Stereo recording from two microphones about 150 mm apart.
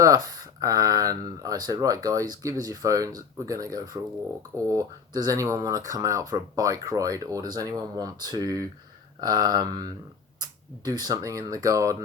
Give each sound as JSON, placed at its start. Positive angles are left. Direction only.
{"t": 0.0, "sound": "speech", "side_deg": -25}